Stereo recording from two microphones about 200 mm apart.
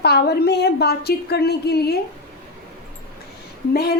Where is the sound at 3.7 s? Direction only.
50° left (ahead or behind).